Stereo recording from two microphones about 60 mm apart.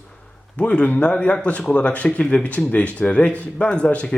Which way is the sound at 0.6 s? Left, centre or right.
Left.